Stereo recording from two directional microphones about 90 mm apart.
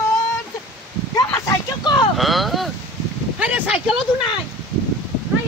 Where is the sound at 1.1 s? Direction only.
40° left (ahead or behind).